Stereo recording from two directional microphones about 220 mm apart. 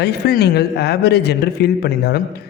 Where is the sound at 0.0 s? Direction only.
45° left (ahead or behind).